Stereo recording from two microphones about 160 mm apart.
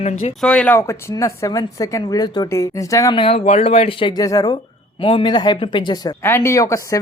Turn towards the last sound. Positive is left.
turn(degrees=20)  # may be behind; listen again after turning